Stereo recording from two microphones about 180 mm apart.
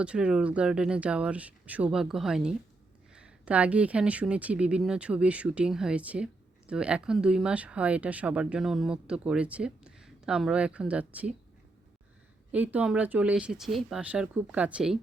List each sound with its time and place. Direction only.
0.0 s speech: 5° right (ahead or behind)
12.5 s speech: 10° right (ahead or behind)